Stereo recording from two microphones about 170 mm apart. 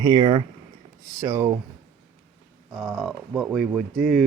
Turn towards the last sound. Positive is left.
turn(degrees=0)  # may be behind; listen again after turning